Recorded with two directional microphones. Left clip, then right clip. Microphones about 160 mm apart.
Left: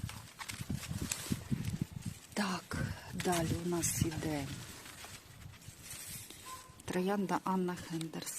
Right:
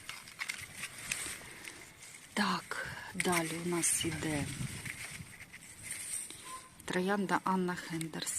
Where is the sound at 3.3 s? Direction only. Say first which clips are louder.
Even; 5° left (ahead or behind).